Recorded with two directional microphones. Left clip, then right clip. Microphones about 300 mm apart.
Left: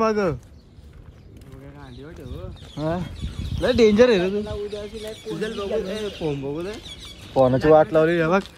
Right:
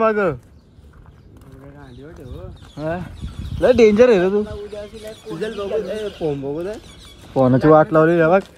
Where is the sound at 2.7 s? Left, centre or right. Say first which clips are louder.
Right 2 dB; centre.